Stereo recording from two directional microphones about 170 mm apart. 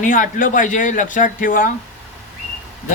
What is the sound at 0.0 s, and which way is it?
Speech, 50° left (ahead or behind).